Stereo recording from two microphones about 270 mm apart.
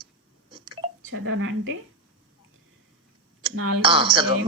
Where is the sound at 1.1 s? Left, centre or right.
Right.